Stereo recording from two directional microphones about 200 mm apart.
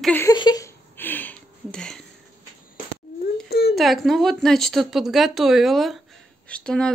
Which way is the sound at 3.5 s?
50° left (ahead or behind).